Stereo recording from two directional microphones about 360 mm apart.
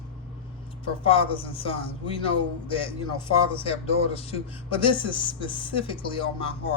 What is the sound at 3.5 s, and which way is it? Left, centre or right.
Speech, centre.